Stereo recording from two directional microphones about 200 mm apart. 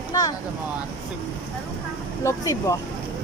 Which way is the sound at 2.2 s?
15° left (ahead or behind).